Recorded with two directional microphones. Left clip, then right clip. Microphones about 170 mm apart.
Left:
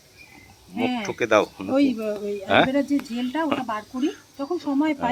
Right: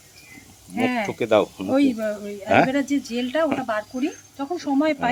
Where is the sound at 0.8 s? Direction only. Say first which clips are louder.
Right 2 dB; 45° right (ahead or behind).